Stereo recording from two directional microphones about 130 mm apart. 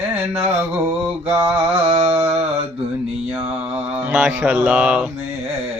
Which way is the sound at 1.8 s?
45° right (ahead or behind).